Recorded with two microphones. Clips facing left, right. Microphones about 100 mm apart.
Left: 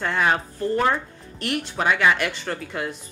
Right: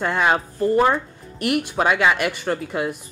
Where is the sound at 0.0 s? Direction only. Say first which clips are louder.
Right 2 dB; 15° right (ahead or behind).